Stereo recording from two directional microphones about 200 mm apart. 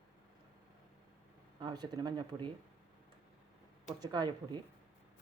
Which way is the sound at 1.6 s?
20° right (ahead or behind).